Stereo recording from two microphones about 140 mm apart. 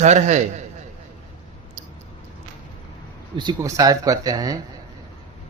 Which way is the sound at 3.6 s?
25° right (ahead or behind).